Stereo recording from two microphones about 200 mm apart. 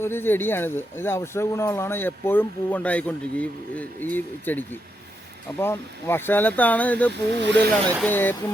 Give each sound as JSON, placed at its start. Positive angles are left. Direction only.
{"t": 0.0, "sound": "speech", "side_deg": 10}
{"t": 7.4, "sound": "speech", "side_deg": -60}
{"t": 8.0, "sound": "speech", "side_deg": 10}